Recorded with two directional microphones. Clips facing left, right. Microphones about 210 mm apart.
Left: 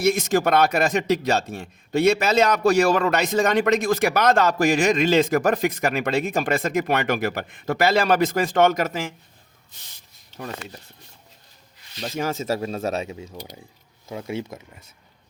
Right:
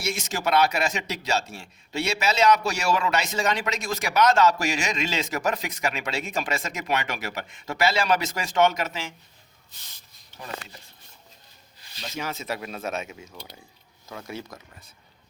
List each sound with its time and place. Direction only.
0.0 s speech: 55° left (ahead or behind)
11.9 s speech: 45° left (ahead or behind); by 14.8 s 25° left (ahead or behind)